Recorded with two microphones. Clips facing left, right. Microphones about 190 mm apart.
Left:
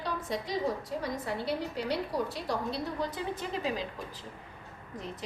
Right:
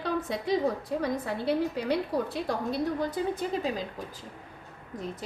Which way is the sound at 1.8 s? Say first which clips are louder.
Right 4 dB; 55° right (ahead or behind).